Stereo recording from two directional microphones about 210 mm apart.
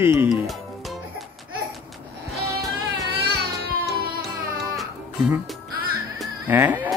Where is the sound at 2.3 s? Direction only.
50° right (ahead or behind).